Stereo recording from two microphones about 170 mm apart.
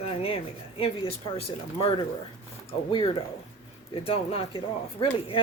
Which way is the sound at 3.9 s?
35° left (ahead or behind).